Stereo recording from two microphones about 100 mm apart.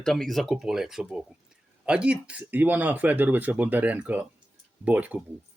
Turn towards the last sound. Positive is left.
turn(degrees=-15)  # may be behind; listen again after turning